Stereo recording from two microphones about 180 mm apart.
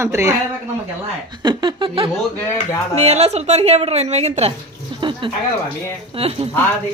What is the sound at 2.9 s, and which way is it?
A woman's voice, 35° right (ahead or behind).